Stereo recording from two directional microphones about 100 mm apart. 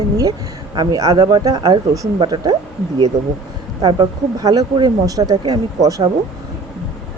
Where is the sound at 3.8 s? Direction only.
45° right (ahead or behind).